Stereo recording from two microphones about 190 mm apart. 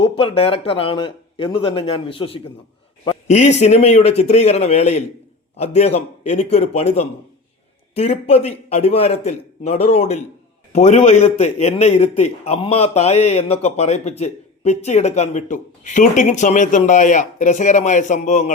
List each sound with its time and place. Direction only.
0.0 s a man's voice: 30° left (ahead or behind)